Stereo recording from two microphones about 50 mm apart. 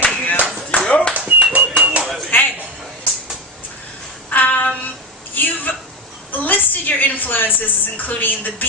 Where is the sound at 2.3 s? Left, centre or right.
Left.